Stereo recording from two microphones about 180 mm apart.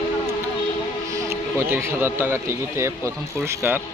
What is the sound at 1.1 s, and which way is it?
Speech, 15° right (ahead or behind).